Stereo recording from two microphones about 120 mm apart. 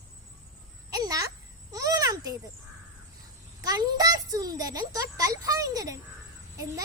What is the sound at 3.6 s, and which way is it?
A child's voice, 30° right (ahead or behind).